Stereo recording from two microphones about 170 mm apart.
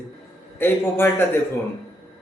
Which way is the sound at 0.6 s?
10° left (ahead or behind).